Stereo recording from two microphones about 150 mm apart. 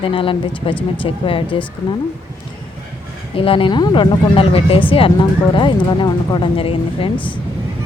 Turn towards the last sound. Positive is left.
turn(degrees=10)  # may be behind; listen again after turning